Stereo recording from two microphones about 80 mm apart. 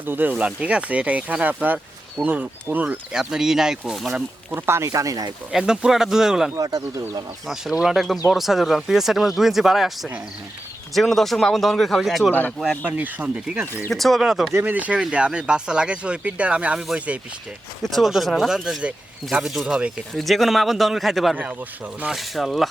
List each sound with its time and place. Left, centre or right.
0.0 s speech: right
3.1 s speech: centre
4.5 s speech: right
4.9 s speech: right
5.5 s speech: centre
6.6 s speech: right
7.4 s speech: centre
12.3 s speech: left
12.8 s speech: right
13.9 s speech: centre
14.6 s speech: centre
17.8 s speech: centre
20.1 s speech: centre